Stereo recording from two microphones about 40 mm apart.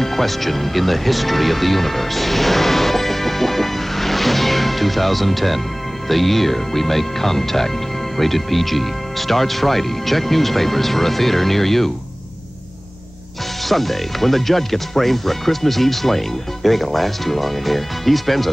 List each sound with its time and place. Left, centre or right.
0.0 s speech: centre
13.7 s speech: centre